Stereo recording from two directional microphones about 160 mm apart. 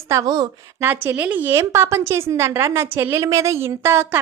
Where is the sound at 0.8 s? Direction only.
15° right (ahead or behind).